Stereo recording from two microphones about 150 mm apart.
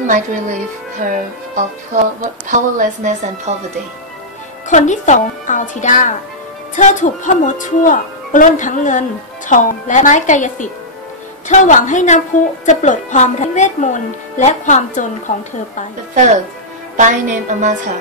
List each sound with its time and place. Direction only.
0.0 s a woman's voice: 60° right (ahead or behind)
4.6 s a woman's voice: 55° left (ahead or behind)
16.9 s a woman's voice: 55° right (ahead or behind)